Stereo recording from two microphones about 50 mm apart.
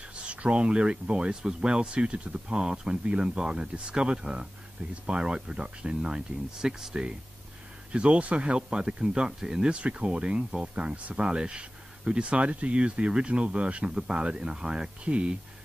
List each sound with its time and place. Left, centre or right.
0.3 s speech: right